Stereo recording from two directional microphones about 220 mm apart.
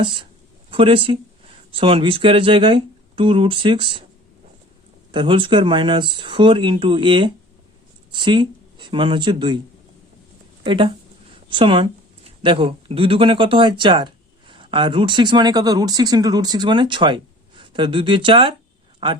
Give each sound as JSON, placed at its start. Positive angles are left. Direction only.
{"t": 0.0, "sound": "speech", "side_deg": -20}
{"t": 5.1, "sound": "speech", "side_deg": -20}
{"t": 10.6, "sound": "a woman's voice", "side_deg": -20}